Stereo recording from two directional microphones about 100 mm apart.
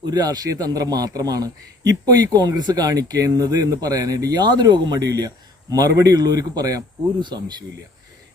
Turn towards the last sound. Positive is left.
turn(degrees=-50)  # may be behind; listen again after turning